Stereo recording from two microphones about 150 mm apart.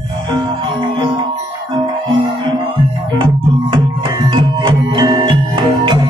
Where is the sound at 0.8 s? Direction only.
30° right (ahead or behind).